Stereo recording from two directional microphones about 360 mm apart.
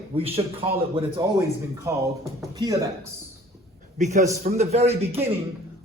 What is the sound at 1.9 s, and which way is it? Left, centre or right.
Speech, centre.